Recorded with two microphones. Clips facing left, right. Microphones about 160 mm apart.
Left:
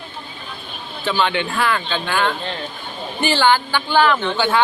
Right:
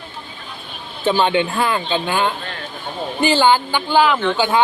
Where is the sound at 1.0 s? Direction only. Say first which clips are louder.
Right 4 dB; 25° right (ahead or behind).